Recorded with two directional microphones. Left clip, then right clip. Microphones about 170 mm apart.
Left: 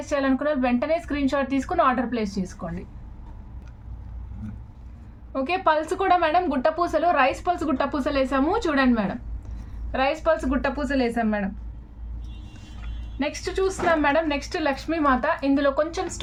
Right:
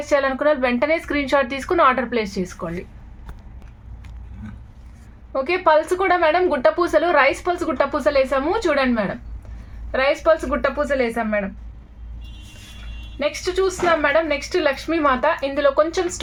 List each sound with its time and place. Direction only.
0.1 s a woman's voice: 45° right (ahead or behind)
5.3 s a woman's voice: 45° right (ahead or behind)
13.1 s a woman's voice: 45° right (ahead or behind)